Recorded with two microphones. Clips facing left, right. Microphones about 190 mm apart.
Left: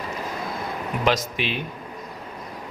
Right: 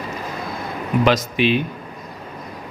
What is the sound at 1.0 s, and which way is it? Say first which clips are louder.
Speech: right 5 dB; 80° right.